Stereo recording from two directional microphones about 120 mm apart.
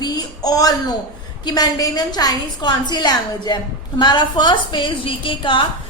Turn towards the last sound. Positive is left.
turn(degrees=45)  # may be behind; listen again after turning